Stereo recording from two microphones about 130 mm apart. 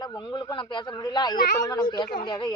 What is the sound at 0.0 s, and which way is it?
Speech, 35° left (ahead or behind).